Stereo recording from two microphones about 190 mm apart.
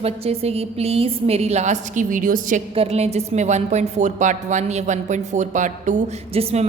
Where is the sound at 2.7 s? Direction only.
35° right (ahead or behind).